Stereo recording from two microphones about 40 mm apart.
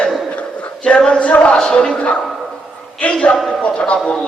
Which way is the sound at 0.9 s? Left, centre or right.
Left.